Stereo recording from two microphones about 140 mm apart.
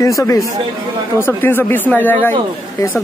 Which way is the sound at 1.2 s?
15° left (ahead or behind).